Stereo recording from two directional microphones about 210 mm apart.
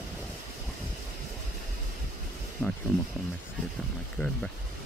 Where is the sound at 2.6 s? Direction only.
10° left (ahead or behind).